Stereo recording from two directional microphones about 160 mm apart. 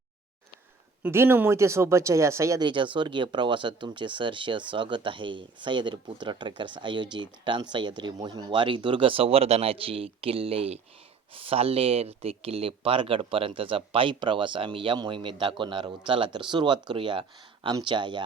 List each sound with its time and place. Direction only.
1.0 s speech: 15° right (ahead or behind)
2.6 s speech: 30° right (ahead or behind)